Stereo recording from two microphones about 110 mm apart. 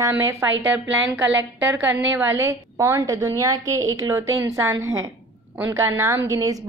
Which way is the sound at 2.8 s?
30° right (ahead or behind).